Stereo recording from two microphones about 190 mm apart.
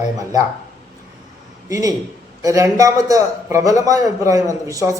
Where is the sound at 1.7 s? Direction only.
15° right (ahead or behind).